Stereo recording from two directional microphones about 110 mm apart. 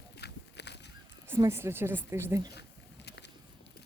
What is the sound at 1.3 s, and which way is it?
A woman's voice, 25° right (ahead or behind).